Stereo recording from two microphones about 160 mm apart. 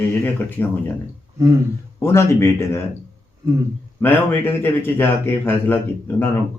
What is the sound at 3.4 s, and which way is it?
Speech, 20° right (ahead or behind).